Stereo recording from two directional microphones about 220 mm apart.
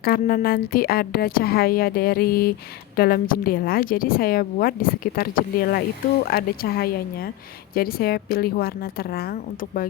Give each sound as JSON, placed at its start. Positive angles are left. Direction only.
{"t": 0.0, "sound": "a woman's voice", "side_deg": 40}